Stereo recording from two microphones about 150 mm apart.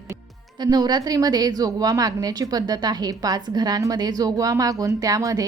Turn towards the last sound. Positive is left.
turn(degrees=-25)  # may be behind; listen again after turning